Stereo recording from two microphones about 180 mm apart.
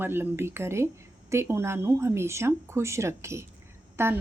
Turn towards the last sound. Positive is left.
turn(degrees=-15)  # may be behind; listen again after turning